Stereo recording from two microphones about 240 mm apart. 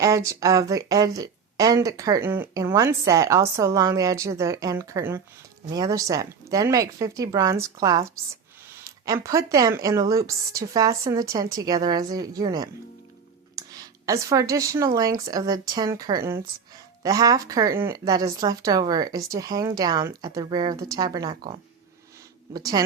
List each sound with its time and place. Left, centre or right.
0.0 s speech: centre
22.5 s speech: centre